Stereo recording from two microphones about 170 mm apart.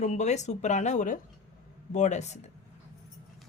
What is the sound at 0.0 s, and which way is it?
Speech, 45° left (ahead or behind).